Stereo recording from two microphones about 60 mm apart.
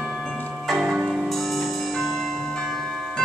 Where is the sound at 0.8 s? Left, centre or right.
Centre.